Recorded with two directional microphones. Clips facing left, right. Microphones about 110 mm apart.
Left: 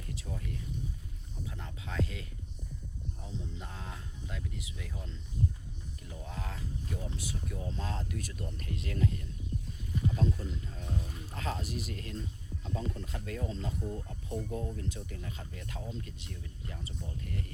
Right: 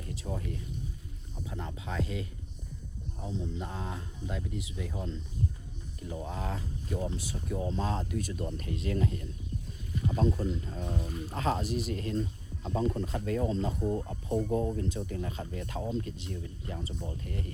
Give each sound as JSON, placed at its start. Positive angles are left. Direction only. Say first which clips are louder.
{"t": 0.1, "sound": "music", "louder": "right 5 dB", "side_deg": -30}
{"t": 1.5, "sound": "speech", "louder": "right 6 dB", "side_deg": -30}
{"t": 6.1, "sound": "speech", "louder": "right 6 dB", "side_deg": -25}